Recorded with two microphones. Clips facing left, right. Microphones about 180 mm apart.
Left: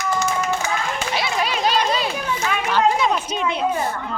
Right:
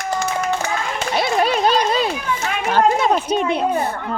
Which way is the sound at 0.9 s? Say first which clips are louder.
Right 4 dB; 50° right (ahead or behind).